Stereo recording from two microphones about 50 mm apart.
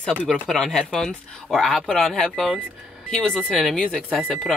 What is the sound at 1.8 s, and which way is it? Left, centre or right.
A woman's voice, centre.